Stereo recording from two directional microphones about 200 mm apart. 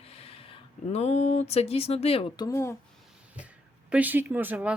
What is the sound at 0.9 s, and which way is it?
Speech, 35° left (ahead or behind).